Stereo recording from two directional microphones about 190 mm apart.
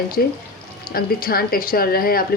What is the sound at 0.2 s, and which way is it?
Speech, 55° left (ahead or behind).